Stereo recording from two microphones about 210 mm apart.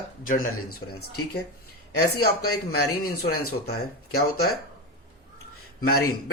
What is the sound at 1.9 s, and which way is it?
Speech, 50° left (ahead or behind).